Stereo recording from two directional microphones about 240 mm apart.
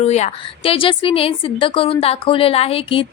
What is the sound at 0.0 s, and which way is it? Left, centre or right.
A woman's voice, left.